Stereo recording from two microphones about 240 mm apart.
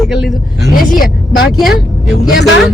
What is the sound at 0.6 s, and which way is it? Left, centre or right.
Speech, left.